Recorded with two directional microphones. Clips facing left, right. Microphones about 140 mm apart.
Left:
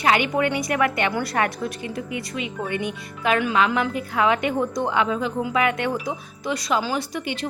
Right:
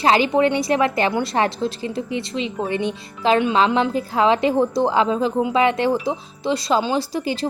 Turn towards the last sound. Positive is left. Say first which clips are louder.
# right 5 dB
turn(degrees=-30)  # may be behind; listen again after turning